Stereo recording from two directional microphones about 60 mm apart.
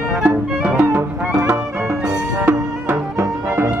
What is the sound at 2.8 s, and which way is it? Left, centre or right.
Music, right.